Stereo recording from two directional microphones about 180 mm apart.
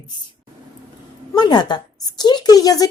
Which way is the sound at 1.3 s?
25° left (ahead or behind).